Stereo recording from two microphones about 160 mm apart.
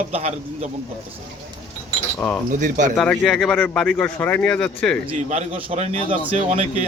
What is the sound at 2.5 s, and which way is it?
Speech, 50° right (ahead or behind).